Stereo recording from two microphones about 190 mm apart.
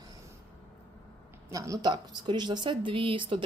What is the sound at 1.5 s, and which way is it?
Speech, 15° right (ahead or behind).